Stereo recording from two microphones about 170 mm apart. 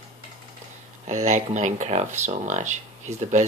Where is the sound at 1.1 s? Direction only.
45° right (ahead or behind).